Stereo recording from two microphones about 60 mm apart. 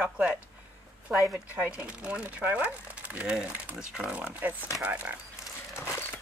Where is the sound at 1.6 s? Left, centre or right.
Centre.